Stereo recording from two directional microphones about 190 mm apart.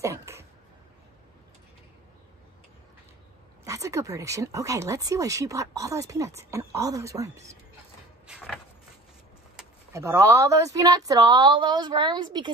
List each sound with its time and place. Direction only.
0.0 s a sound: 15° right (ahead or behind)
3.6 s speech: 15° right (ahead or behind)
9.9 s a woman's voice: 15° right (ahead or behind)